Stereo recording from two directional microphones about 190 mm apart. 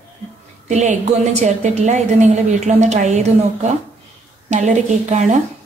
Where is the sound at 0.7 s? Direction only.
40° right (ahead or behind).